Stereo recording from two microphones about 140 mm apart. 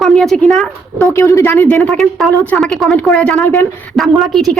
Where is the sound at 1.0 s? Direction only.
20° left (ahead or behind).